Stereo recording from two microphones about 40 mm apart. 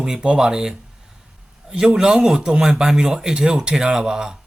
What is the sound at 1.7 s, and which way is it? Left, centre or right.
A man's voice, centre.